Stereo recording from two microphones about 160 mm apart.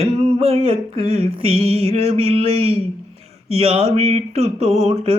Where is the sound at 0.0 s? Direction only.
40° right (ahead or behind).